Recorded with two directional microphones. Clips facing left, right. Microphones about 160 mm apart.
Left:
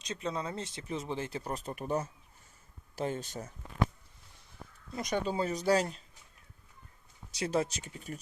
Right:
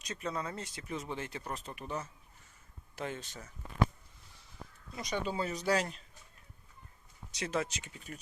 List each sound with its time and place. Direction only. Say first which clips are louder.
0.0 s speech: left 2 dB; 25° left (ahead or behind); by 3.5 s 40° left (ahead or behind)
5.0 s speech: left 3 dB; 45° left (ahead or behind)
7.3 s speech: left 4 dB; 35° left (ahead or behind)